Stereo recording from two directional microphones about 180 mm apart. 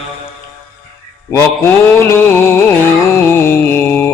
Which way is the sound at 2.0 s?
15° left (ahead or behind).